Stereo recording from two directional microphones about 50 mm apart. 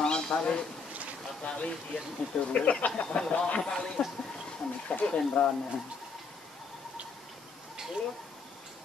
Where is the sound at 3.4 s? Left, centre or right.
Centre.